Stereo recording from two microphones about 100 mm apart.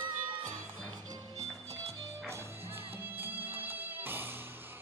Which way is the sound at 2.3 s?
25° right (ahead or behind).